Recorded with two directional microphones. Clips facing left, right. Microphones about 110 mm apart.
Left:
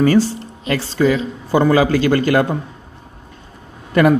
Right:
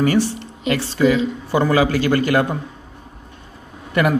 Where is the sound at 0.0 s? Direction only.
30° left (ahead or behind).